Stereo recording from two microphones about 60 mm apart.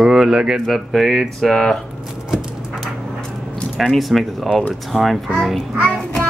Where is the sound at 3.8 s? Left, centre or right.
Centre.